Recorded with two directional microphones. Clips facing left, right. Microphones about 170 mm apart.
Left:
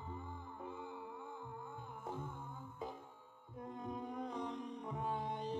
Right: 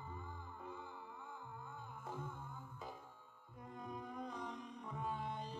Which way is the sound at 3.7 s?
25° left (ahead or behind).